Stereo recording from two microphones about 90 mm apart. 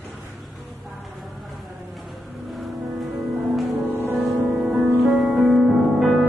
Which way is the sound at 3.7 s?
25° right (ahead or behind).